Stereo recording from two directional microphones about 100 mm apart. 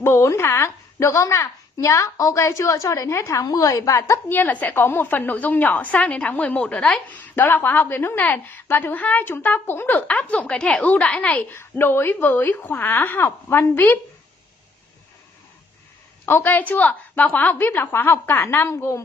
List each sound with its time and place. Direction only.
0.0 s a woman's voice: 30° left (ahead or behind)
16.3 s a woman's voice: 20° left (ahead or behind)